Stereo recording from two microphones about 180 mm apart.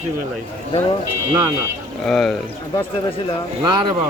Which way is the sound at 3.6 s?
25° right (ahead or behind).